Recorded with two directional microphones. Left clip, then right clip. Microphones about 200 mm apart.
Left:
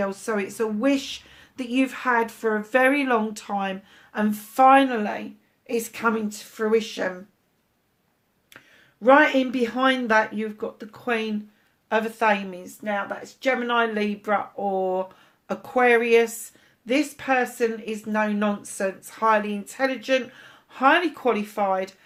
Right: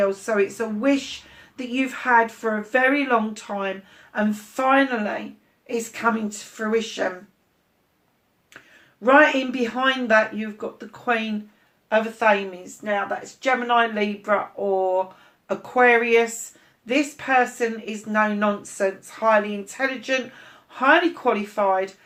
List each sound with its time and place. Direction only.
0.0 s speech: 45° left (ahead or behind)
9.0 s speech: 45° left (ahead or behind)
15.4 s speech: 45° left (ahead or behind)